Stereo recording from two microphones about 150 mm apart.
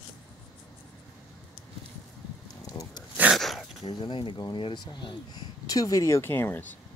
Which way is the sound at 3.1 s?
10° right (ahead or behind).